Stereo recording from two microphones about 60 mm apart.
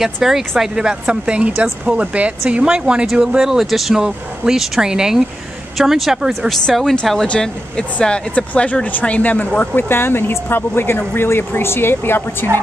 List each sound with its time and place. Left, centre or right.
0.0 s speech: centre
7.2 s speech: centre
9.6 s speech: left